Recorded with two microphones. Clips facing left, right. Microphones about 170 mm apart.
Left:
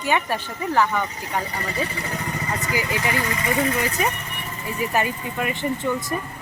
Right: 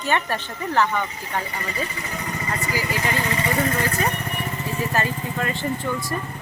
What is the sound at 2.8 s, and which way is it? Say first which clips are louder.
Speech: left 1 dB; 20° left (ahead or behind).